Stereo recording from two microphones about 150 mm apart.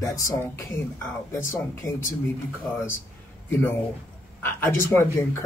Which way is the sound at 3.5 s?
15° left (ahead or behind).